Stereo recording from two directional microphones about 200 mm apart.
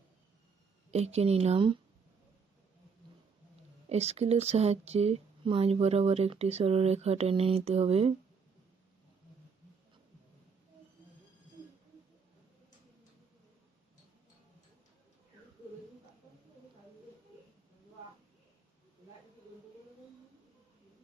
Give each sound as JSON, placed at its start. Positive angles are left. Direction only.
{"t": 0.9, "sound": "speech", "side_deg": -35}
{"t": 3.8, "sound": "speech", "side_deg": -30}